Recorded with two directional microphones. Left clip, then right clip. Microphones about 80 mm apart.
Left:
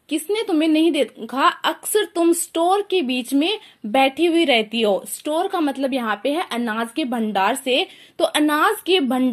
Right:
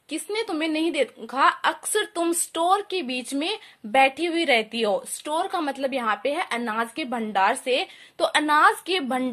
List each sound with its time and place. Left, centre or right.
0.1 s speech: left